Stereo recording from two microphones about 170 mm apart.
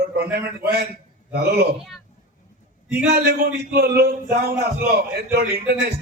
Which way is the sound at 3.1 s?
70° right (ahead or behind).